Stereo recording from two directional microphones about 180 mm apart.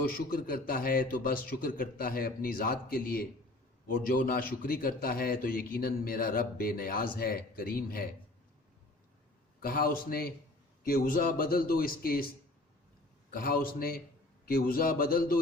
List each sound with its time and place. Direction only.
0.1 s a man's voice: 55° left (ahead or behind)
9.6 s a man's voice: 55° left (ahead or behind)
13.3 s a man's voice: 55° left (ahead or behind)